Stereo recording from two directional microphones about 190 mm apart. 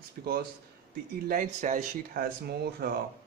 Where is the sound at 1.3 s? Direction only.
45° right (ahead or behind).